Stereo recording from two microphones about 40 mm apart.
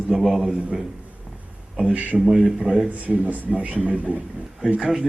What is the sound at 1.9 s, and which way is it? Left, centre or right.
Speech, right.